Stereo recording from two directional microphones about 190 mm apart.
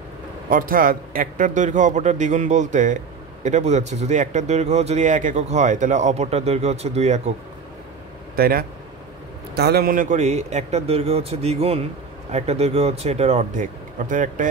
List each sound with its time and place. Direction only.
0.5 s speech: 45° right (ahead or behind)
8.4 s speech: 50° right (ahead or behind)